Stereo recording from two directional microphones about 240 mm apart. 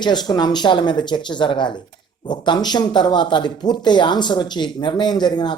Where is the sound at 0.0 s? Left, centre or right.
Centre.